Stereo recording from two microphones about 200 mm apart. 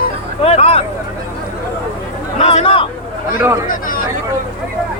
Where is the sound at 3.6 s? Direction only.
45° left (ahead or behind).